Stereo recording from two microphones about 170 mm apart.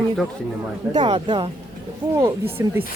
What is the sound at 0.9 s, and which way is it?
Speech, 40° right (ahead or behind).